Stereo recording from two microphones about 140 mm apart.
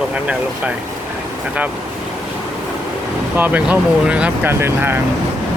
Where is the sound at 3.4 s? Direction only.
10° right (ahead or behind).